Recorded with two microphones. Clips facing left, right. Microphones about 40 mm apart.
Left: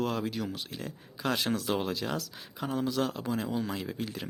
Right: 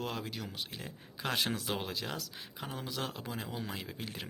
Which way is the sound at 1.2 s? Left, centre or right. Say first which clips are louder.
Left 6 dB; right.